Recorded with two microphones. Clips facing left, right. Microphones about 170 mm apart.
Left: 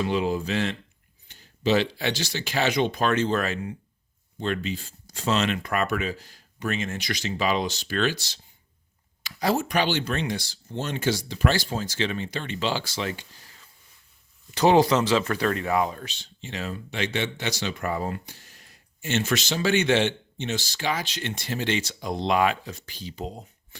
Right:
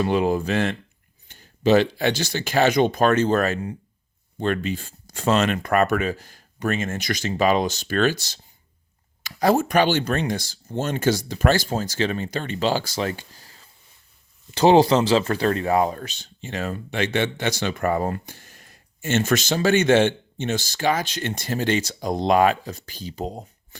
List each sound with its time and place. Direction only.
0.0 s speech: 50° right (ahead or behind)
4.4 s speech: 50° right (ahead or behind)